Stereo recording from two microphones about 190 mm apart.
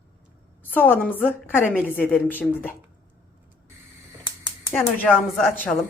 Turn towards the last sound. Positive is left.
turn(degrees=10)  # may be behind; listen again after turning